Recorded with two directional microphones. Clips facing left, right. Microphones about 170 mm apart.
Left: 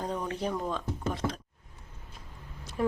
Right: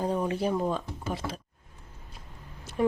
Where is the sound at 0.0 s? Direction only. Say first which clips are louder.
Right 5 dB; 10° right (ahead or behind).